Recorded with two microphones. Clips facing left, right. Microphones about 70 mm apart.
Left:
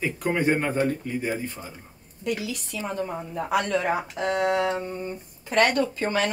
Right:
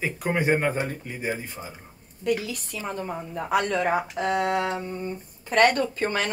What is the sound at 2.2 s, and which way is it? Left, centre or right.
Speech, right.